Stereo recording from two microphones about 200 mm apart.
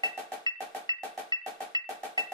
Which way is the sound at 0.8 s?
20° right (ahead or behind).